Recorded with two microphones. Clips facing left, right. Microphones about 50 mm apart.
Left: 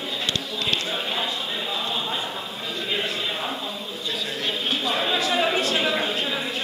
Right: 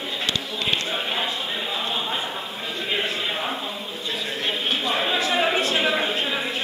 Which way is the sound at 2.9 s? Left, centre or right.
Centre.